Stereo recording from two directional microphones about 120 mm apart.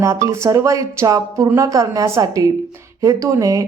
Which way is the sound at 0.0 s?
25° right (ahead or behind).